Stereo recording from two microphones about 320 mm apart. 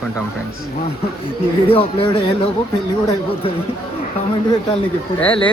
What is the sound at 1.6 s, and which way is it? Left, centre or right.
Speech, centre.